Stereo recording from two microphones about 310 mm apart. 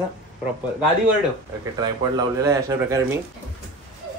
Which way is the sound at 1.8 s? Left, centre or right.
Centre.